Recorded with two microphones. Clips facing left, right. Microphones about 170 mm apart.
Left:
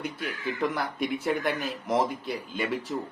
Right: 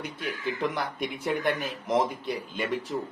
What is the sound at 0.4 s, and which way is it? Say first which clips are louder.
A man's voice: left 1 dB; centre (ahead or behind).